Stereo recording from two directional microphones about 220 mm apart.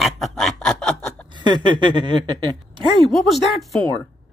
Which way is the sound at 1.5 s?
20° right (ahead or behind).